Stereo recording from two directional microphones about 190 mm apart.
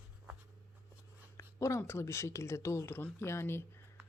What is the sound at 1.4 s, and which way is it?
Speech, 15° left (ahead or behind).